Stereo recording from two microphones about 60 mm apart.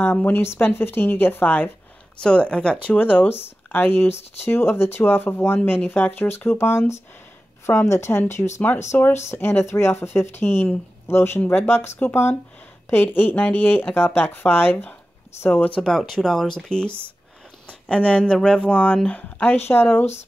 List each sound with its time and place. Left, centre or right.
0.0 s speech: left
2.2 s speech: centre; by 14.9 s left
15.8 s speech: centre; by 20.1 s left